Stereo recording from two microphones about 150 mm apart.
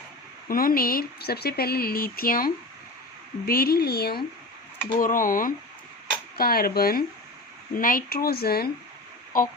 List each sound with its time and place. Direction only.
0.4 s speech: 75° left (ahead or behind)
3.4 s speech: 85° left
4.9 s speech: 65° left (ahead or behind)
6.3 s speech: 85° left
7.8 s speech: 70° left (ahead or behind); by 8.7 s 90° left
9.3 s speech: 65° left (ahead or behind)